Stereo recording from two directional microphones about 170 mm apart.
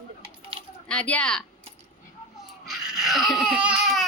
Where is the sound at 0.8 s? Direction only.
10° left (ahead or behind).